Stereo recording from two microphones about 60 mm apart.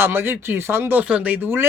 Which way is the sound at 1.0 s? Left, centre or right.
Right.